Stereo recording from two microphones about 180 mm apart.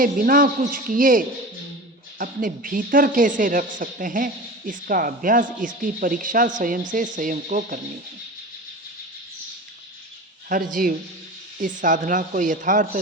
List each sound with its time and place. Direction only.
0.0 s speech: 50° right (ahead or behind)
10.5 s speech: 50° right (ahead or behind)